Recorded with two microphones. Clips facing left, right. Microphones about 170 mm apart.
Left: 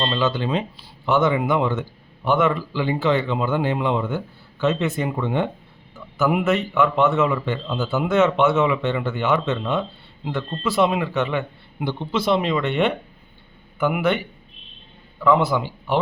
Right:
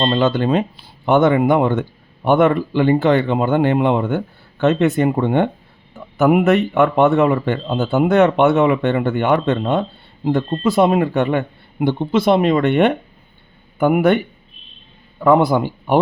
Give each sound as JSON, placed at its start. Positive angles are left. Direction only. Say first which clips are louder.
{"t": 0.0, "sound": "speech", "louder": "right 6 dB", "side_deg": -55}